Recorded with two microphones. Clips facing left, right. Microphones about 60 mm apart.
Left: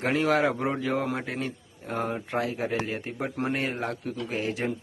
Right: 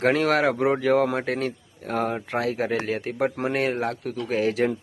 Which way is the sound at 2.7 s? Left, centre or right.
Right.